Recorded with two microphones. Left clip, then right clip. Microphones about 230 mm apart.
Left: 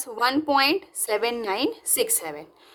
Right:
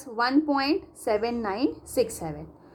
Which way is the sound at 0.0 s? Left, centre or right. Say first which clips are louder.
Left 1 dB; left.